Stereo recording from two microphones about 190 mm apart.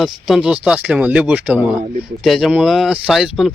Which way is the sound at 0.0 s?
Centre (ahead or behind).